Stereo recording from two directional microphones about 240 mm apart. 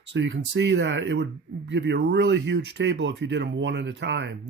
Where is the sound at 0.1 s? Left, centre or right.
Right.